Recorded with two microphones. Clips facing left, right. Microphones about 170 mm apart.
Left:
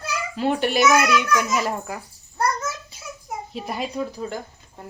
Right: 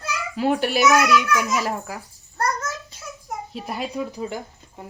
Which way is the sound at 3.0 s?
Centre (ahead or behind).